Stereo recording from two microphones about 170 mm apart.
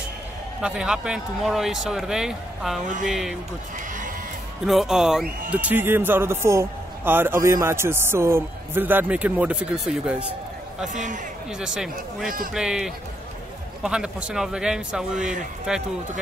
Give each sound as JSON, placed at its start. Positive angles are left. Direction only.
{"t": 0.6, "sound": "speech", "side_deg": -5}
{"t": 4.6, "sound": "a man's voice", "side_deg": 0}
{"t": 10.9, "sound": "a man's voice", "side_deg": -50}
{"t": 11.5, "sound": "speech", "side_deg": -5}